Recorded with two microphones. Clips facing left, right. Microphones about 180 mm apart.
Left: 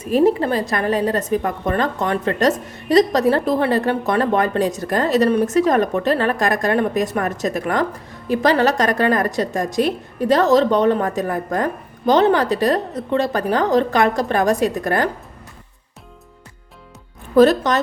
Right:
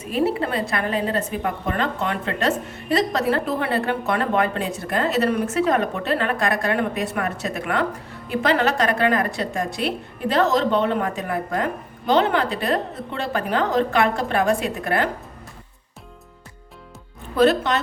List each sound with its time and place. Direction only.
0.0 s a woman's voice: 40° left (ahead or behind)
17.3 s a woman's voice: 40° left (ahead or behind)